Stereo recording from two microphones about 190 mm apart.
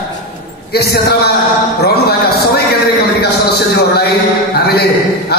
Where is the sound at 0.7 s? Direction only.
55° left (ahead or behind).